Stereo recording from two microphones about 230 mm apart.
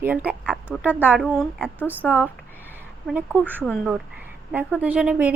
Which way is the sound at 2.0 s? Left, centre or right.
Centre.